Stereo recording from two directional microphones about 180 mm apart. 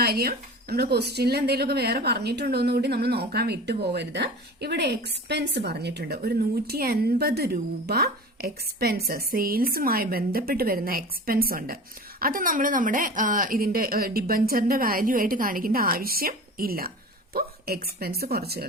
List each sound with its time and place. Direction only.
0.0 s a woman's voice: 60° right (ahead or behind)